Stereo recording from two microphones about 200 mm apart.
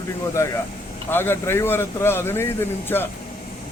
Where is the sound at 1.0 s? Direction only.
10° left (ahead or behind).